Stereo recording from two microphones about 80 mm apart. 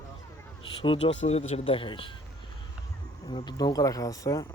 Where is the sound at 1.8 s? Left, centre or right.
Left.